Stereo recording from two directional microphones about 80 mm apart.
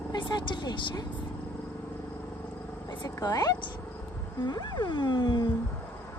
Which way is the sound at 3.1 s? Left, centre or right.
Left.